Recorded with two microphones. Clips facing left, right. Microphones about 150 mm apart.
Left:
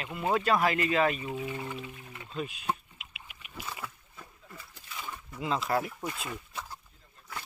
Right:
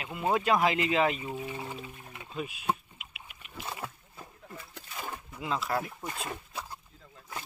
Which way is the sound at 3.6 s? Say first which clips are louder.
Right 3 dB; 30° right (ahead or behind).